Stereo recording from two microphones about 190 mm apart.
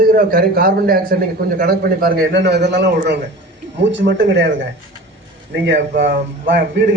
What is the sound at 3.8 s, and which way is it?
Speech, 75° right (ahead or behind).